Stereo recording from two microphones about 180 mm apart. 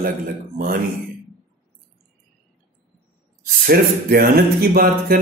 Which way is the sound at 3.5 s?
55° right (ahead or behind).